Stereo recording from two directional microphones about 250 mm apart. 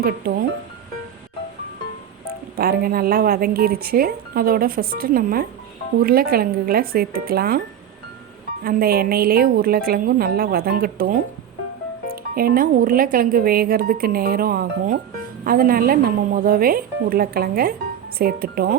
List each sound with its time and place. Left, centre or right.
0.0 s speech: right
2.6 s speech: right
8.6 s speech: right